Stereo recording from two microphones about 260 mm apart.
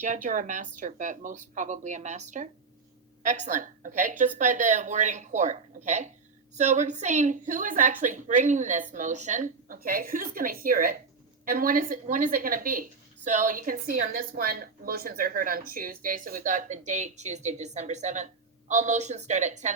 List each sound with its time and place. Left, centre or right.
0.0 s a woman's voice: right